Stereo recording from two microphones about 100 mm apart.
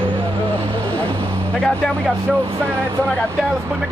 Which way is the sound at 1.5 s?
5° left (ahead or behind).